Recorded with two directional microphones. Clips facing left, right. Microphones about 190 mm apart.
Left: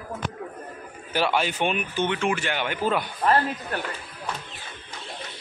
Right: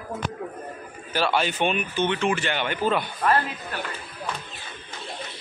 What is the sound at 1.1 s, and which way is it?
A man's voice, 15° left (ahead or behind).